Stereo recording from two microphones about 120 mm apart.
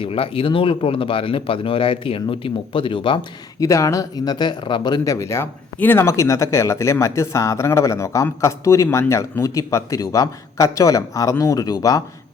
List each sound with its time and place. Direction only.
0.0 s speech: 50° left (ahead or behind)
3.6 s speech: 25° left (ahead or behind)